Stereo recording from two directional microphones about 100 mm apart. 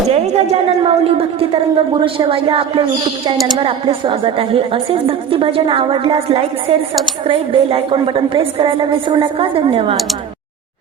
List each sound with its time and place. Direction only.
0.1 s a woman's voice: 90° right; by 10.0 s 65° right (ahead or behind)